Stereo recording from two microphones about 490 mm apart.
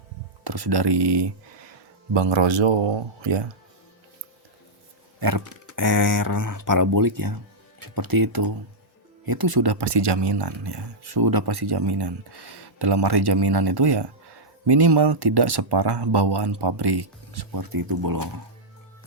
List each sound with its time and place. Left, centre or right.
0.4 s a man's voice: right
5.5 s speech: right